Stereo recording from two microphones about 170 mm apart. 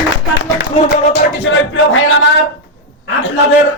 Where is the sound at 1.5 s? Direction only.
90° left.